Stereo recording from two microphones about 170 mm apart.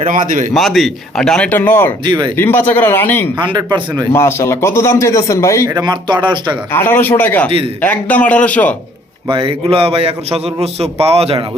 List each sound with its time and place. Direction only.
0.1 s a man's voice: 55° right (ahead or behind)
0.5 s speech: centre (ahead or behind)
2.0 s speech: 25° right (ahead or behind)
2.3 s a man's voice: 15° left (ahead or behind)
3.4 s speech: 25° right (ahead or behind)
4.1 s a man's voice: 15° left (ahead or behind)
5.6 s speech: 25° right (ahead or behind)
6.7 s a man's voice: 15° left (ahead or behind)
9.3 s a man's voice: 30° right (ahead or behind)